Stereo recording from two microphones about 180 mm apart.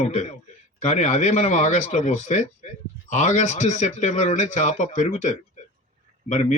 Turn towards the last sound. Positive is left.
turn(degrees=40)  # may be behind; listen again after turning